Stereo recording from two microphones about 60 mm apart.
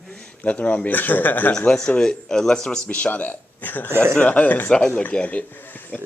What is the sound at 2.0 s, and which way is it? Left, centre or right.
Speech, centre.